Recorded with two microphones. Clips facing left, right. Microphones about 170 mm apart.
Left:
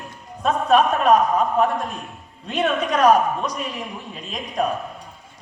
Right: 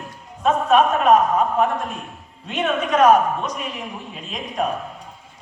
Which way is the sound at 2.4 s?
35° left (ahead or behind).